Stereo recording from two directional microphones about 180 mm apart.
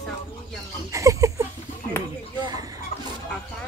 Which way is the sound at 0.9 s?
15° right (ahead or behind).